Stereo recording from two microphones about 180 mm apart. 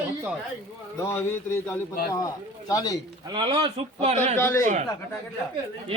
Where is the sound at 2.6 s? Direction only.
20° left (ahead or behind).